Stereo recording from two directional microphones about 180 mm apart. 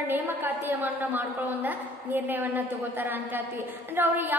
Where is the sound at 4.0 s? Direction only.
10° right (ahead or behind).